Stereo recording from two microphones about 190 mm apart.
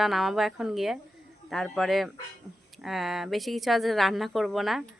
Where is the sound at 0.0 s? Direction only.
Centre (ahead or behind).